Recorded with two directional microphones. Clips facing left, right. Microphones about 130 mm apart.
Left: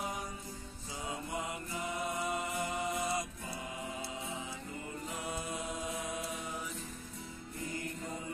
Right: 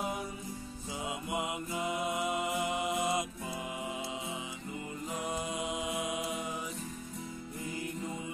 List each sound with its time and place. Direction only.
1.0 s music: 20° right (ahead or behind)